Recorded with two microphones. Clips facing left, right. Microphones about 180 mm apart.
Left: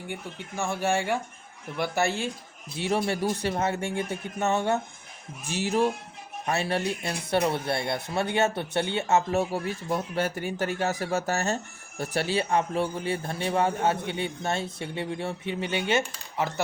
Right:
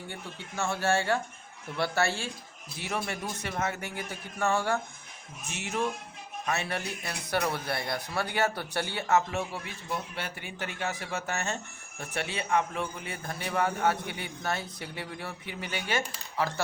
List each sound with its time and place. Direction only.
0.1 s speech: 15° left (ahead or behind)
2.7 s speech: 30° left (ahead or behind)
5.5 s speech: 35° left (ahead or behind)
9.3 s speech: 40° left (ahead or behind); by 16.6 s 20° left (ahead or behind)